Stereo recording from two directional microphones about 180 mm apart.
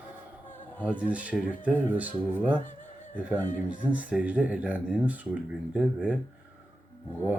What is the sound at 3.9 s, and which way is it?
Speech, 10° right (ahead or behind).